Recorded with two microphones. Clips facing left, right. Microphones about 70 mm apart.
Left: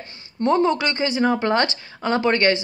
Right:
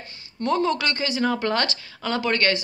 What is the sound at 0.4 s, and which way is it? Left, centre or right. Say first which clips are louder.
A woman's voice: left 4 dB; left.